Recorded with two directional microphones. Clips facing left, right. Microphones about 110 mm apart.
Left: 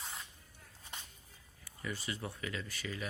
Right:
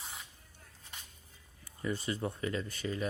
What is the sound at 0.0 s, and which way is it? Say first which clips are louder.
Spray: left 1 dB; centre (ahead or behind).